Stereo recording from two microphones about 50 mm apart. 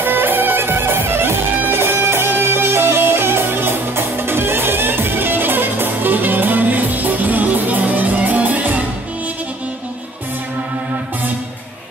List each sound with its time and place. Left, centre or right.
0.0 s music: right